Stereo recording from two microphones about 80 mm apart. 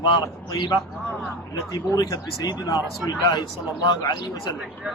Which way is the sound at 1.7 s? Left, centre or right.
Left.